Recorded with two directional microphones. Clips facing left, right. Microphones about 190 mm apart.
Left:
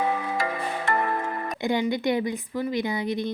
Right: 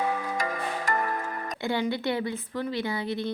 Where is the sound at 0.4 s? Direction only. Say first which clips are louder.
Left 2 dB; 30° left (ahead or behind).